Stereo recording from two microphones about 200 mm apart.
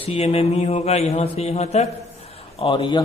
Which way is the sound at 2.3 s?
30° left (ahead or behind).